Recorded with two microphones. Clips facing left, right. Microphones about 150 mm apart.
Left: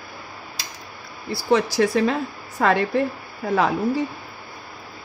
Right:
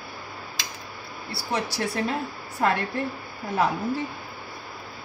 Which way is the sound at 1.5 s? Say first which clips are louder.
Left 9 dB; 90° left.